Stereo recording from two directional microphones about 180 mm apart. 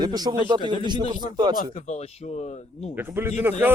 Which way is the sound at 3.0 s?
10° right (ahead or behind).